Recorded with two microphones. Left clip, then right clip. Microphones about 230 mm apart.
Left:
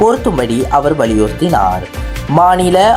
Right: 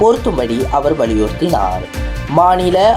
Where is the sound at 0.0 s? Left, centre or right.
Left.